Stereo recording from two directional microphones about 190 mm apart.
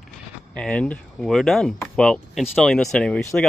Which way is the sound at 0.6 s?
5° left (ahead or behind).